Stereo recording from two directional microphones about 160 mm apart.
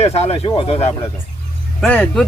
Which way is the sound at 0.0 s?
40° left (ahead or behind).